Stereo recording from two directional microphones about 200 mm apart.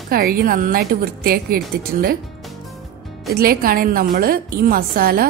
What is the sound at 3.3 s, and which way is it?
A woman's voice, 50° right (ahead or behind).